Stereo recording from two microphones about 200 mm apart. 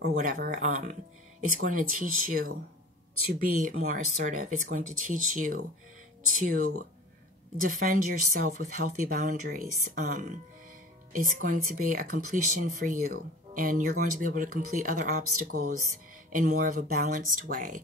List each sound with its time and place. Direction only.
0.0 s speech: 45° right (ahead or behind)
15.2 s speech: 90° right
16.3 s speech: 40° right (ahead or behind)